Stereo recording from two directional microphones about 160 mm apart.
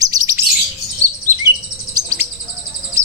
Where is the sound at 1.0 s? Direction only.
20° right (ahead or behind).